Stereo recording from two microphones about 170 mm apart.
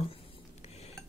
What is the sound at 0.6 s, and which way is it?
Cutlery, 40° left (ahead or behind).